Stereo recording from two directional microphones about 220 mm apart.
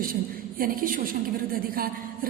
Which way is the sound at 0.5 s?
40° right (ahead or behind).